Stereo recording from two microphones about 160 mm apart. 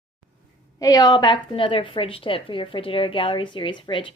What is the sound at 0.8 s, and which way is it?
A woman's voice, 25° left (ahead or behind).